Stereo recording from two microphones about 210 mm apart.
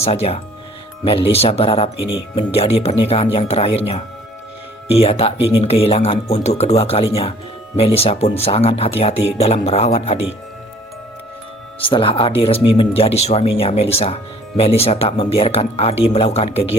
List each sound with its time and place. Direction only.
0.0 s speech: 30° left (ahead or behind)
11.8 s speech: 25° left (ahead or behind)